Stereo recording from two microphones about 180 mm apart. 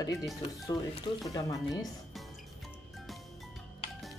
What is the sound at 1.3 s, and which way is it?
Speech, 20° left (ahead or behind).